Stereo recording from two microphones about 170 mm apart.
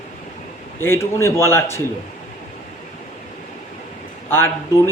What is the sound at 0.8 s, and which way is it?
Speech, 15° left (ahead or behind).